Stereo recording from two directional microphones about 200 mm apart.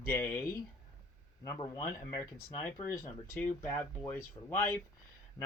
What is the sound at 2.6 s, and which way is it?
Speech, 15° left (ahead or behind).